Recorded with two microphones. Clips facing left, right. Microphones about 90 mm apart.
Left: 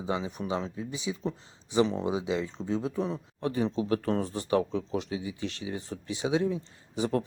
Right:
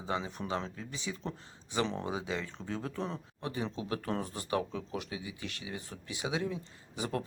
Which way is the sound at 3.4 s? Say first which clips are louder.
Left 8 dB; 35° left (ahead or behind).